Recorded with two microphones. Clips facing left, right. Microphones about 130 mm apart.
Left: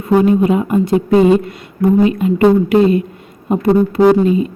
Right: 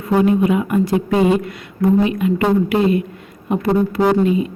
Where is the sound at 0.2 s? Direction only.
25° left (ahead or behind).